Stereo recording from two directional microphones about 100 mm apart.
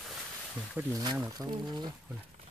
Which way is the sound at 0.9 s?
45° right (ahead or behind).